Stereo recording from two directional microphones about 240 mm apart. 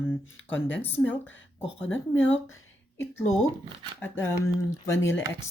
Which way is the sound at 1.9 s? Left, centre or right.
Left.